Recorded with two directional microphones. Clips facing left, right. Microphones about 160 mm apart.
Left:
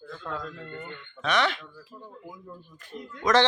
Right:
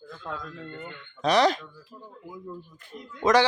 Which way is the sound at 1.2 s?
35° right (ahead or behind).